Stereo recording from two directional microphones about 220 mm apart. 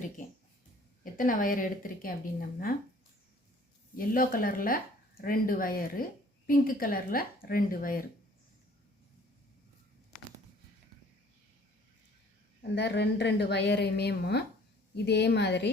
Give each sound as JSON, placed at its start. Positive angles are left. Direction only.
{"t": 0.2, "sound": "speech", "side_deg": 35}
{"t": 3.9, "sound": "speech", "side_deg": 40}
{"t": 12.7, "sound": "a woman's voice", "side_deg": 50}